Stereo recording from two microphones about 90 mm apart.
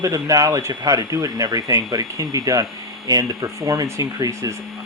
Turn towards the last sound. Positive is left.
turn(degrees=-40)  # may be behind; listen again after turning